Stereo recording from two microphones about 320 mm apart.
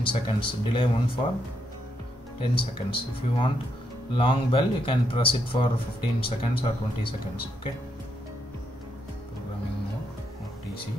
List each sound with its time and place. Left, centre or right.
0.0 s speech: centre
2.5 s speech: centre